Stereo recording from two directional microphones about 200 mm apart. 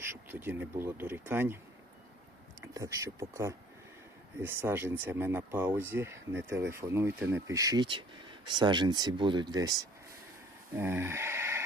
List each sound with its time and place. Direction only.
0.1 s speech: 10° right (ahead or behind)
2.7 s speech: 15° right (ahead or behind)